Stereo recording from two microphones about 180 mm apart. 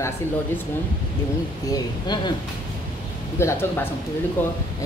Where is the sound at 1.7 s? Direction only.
25° left (ahead or behind).